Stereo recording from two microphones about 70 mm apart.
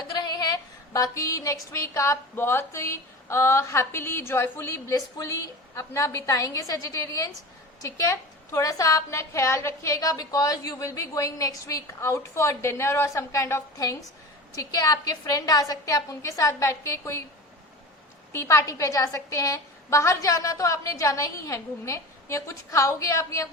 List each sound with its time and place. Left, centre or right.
0.2 s a sound: left
2.3 s a woman's voice: left
11.9 s a woman's voice: left
18.3 s a woman's voice: left